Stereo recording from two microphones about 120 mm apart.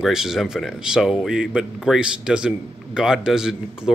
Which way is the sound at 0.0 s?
5° right (ahead or behind).